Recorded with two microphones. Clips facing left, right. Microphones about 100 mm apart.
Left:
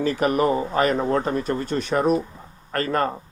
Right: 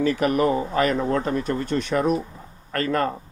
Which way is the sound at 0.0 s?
25° left (ahead or behind).